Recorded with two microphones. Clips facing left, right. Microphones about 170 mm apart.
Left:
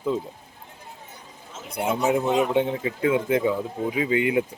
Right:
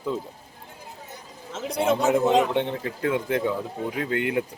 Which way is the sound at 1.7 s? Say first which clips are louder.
Right 1 dB; 10° left (ahead or behind).